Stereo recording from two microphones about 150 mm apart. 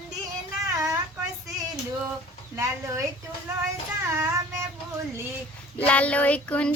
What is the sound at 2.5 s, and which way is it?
Speech, 20° right (ahead or behind).